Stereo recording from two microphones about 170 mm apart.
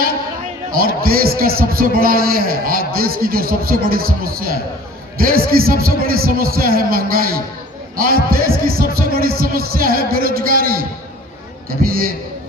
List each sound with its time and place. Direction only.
0.8 s a man's voice: 60° right (ahead or behind)